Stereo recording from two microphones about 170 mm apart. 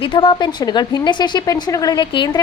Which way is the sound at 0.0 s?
30° left (ahead or behind).